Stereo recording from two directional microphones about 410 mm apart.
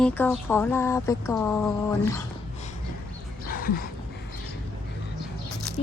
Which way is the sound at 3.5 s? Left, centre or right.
Left.